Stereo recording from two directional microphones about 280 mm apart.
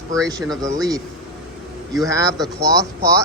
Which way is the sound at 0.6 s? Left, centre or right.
Centre.